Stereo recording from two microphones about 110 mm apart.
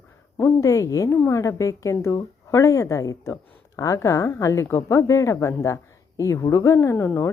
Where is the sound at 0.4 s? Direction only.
30° left (ahead or behind).